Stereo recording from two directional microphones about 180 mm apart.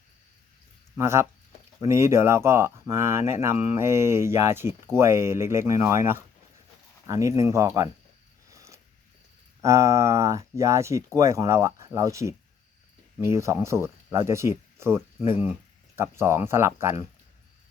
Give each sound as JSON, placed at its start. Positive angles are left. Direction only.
{"t": 0.9, "sound": "speech", "side_deg": -15}
{"t": 8.4, "sound": "a sound", "side_deg": -15}
{"t": 9.6, "sound": "speech", "side_deg": -15}